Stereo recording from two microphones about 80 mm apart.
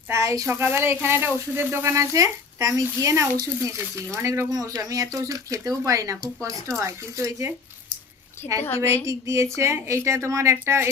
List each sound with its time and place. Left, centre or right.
0.1 s speech: right
4.5 s speech: right
8.4 s a woman's voice: left
9.0 s speech: right